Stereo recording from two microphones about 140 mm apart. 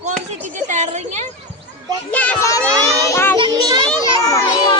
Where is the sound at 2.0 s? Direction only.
10° left (ahead or behind).